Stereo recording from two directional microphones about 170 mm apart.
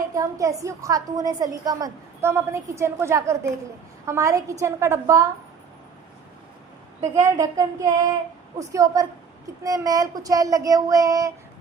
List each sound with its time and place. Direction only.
0.1 s a woman's voice: 20° right (ahead or behind)
7.0 s a woman's voice: 20° right (ahead or behind)